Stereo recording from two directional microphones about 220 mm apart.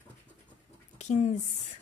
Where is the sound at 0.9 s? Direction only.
30° left (ahead or behind).